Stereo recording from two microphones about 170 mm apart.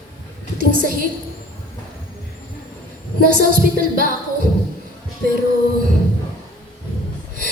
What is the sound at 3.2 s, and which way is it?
Music, 55° right (ahead or behind).